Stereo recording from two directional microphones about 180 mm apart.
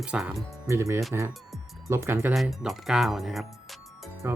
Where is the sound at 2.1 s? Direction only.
Centre (ahead or behind).